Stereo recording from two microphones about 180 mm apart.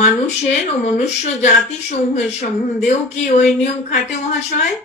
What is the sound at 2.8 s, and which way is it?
A woman's voice, 40° left (ahead or behind).